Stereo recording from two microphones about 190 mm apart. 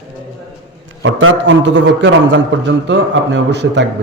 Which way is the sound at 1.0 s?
90° right.